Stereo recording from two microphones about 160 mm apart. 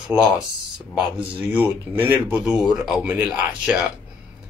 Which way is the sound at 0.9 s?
10° right (ahead or behind).